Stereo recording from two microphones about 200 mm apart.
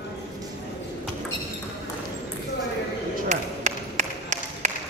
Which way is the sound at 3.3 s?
35° right (ahead or behind).